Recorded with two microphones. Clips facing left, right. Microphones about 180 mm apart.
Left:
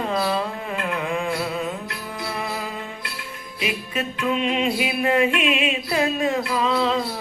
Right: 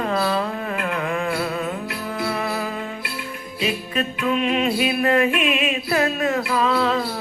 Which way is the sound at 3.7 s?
20° left (ahead or behind).